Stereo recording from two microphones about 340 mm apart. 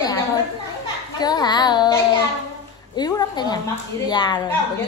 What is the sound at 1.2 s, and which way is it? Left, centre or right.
Speech, centre.